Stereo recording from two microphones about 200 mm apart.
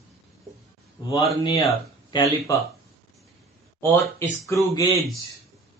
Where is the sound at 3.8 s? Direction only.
10° left (ahead or behind).